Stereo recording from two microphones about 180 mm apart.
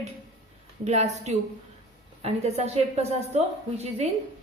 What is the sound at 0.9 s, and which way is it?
A woman's voice, 40° right (ahead or behind).